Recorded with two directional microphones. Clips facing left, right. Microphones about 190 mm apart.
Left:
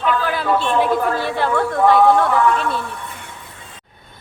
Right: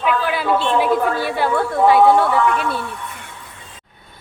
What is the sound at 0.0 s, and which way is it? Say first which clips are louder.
A woman's voice: even; 5° right (ahead or behind).